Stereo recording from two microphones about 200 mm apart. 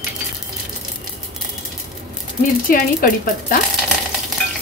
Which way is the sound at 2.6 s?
45° left (ahead or behind).